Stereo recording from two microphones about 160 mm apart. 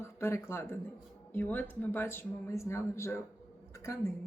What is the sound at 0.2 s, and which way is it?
A woman's voice, 15° left (ahead or behind).